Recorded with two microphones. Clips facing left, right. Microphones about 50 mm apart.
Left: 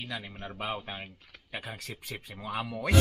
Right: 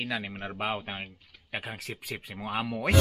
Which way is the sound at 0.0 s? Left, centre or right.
Right.